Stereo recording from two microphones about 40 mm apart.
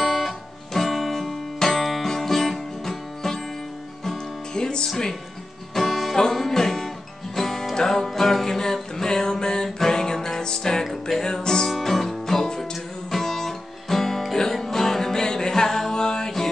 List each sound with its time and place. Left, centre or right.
0.0 s music: centre
4.6 s music: centre
4.8 s speech: centre
5.8 s music: centre
6.1 s music: centre
8.1 s music: centre
11.7 s music: centre